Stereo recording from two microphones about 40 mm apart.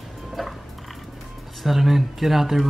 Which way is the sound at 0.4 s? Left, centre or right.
Centre.